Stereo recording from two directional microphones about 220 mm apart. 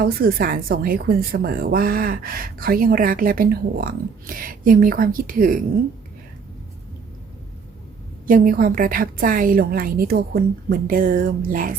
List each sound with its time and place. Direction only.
0.0 s a woman's voice: 40° right (ahead or behind)
8.3 s a woman's voice: 40° right (ahead or behind)